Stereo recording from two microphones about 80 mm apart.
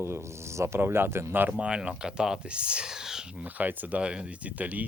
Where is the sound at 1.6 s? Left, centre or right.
Centre.